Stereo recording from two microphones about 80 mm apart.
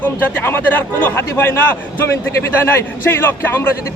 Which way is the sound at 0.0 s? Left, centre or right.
Left.